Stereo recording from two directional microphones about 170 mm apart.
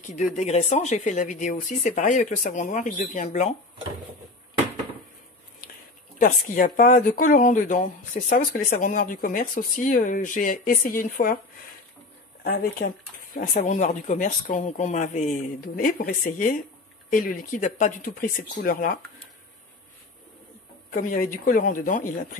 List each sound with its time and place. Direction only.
0.0 s speech: 45° left (ahead or behind)
6.1 s speech: 55° left (ahead or behind)
12.8 s speech: 60° left (ahead or behind)
13.5 s speech: 45° left (ahead or behind)
15.7 s speech: 55° left (ahead or behind)
20.9 s speech: 50° left (ahead or behind)